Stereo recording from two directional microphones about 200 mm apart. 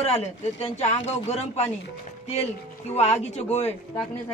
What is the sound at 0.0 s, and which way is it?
Speech, 30° left (ahead or behind).